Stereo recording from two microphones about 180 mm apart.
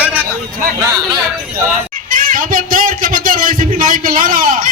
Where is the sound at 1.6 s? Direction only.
50° right (ahead or behind).